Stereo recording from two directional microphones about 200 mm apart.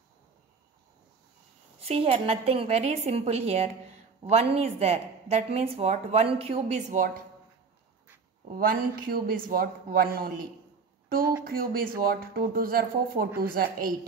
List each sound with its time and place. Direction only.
1.8 s a woman's voice: 30° right (ahead or behind)
8.5 s a man's voice: 45° right (ahead or behind)